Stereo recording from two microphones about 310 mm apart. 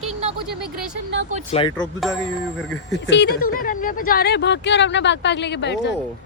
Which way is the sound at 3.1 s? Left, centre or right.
Left.